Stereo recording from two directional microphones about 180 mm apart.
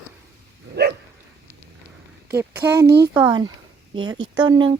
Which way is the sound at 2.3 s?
15° right (ahead or behind).